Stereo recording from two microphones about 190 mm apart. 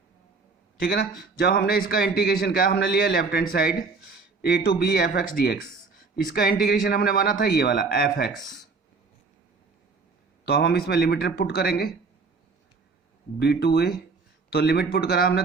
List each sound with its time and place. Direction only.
1.2 s a man's voice: 55° left (ahead or behind)
10.4 s speech: 55° left (ahead or behind)
13.4 s speech: 60° left (ahead or behind)